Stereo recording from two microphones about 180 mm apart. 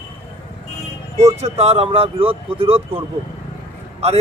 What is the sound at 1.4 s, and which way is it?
Speech, 35° right (ahead or behind).